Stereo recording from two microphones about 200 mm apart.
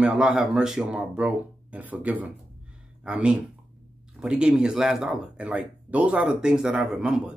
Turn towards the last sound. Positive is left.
turn(degrees=-5)  # may be behind; listen again after turning